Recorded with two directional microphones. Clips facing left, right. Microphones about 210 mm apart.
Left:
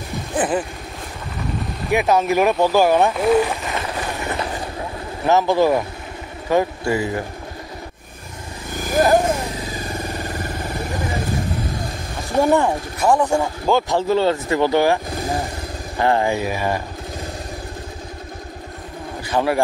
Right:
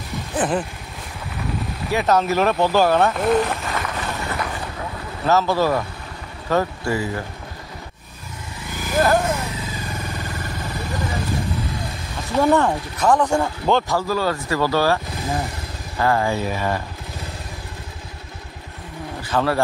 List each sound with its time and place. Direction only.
0.4 s speech: 5° left (ahead or behind)
1.9 s speech: 15° left (ahead or behind)
3.7 s run: 20° left (ahead or behind)
5.2 s speech: 15° left (ahead or behind)
9.0 s vehicle: 15° left (ahead or behind)
12.4 s speech: 10° left (ahead or behind)
13.9 s speech: 25° left (ahead or behind)
16.0 s speech: 20° left (ahead or behind)
19.2 s a man's voice: 15° left (ahead or behind)